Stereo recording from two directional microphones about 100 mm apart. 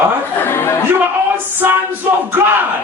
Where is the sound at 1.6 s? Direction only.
25° right (ahead or behind).